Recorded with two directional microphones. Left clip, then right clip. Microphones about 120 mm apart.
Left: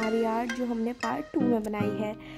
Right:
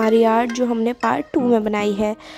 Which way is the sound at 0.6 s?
40° right (ahead or behind).